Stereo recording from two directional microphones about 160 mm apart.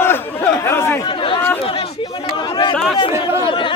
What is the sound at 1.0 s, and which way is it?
Chatter, 30° left (ahead or behind).